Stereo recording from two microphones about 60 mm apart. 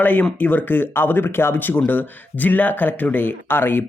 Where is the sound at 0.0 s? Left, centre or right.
Left.